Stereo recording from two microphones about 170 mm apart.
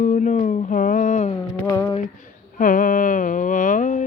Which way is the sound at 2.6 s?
50° left (ahead or behind).